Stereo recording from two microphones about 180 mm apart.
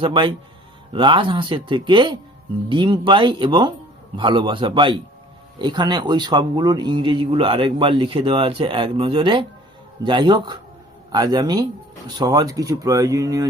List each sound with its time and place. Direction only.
0.0 s speech: 30° right (ahead or behind)